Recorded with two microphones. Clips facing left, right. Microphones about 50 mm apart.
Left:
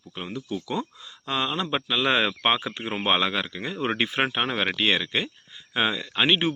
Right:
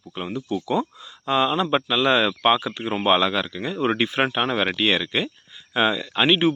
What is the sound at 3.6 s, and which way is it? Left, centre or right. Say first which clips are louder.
Speech: right 5 dB; centre.